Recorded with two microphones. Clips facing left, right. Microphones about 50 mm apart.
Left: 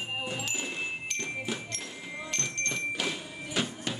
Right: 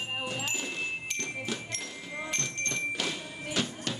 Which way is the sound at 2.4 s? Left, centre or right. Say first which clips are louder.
Left 1 dB; centre.